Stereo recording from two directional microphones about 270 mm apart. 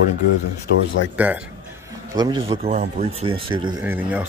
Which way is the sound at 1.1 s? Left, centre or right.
Centre.